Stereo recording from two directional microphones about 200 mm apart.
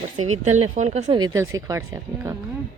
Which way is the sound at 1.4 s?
15° right (ahead or behind).